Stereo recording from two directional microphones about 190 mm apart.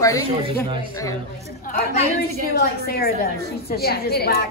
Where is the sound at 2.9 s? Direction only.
55° left (ahead or behind).